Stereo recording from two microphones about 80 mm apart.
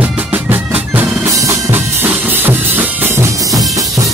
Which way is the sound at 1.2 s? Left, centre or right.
Right.